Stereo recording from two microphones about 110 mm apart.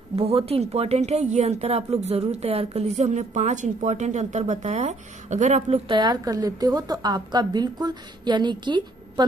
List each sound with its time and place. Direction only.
0.1 s a woman's voice: 65° right (ahead or behind); by 5.8 s 90° right
5.9 s a woman's voice: 40° right (ahead or behind)